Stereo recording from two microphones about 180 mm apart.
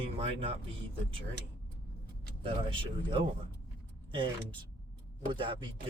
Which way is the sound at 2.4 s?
30° right (ahead or behind).